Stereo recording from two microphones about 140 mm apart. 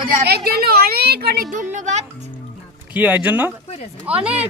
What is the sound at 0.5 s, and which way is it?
Speech, 90° right.